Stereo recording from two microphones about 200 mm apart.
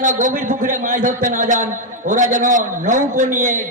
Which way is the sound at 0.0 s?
40° right (ahead or behind).